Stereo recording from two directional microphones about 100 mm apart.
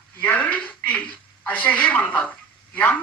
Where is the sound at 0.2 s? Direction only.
15° left (ahead or behind).